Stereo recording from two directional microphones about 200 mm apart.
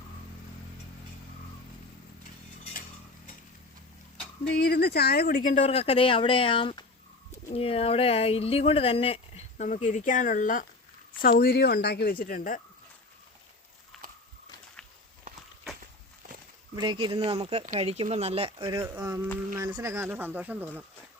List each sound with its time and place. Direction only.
4.4 s a woman's voice: 55° left (ahead or behind)
13.9 s horse: centre (ahead or behind)
16.7 s speech: 20° right (ahead or behind)
18.8 s speech: 10° right (ahead or behind)